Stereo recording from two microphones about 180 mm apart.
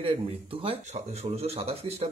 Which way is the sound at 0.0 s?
30° right (ahead or behind).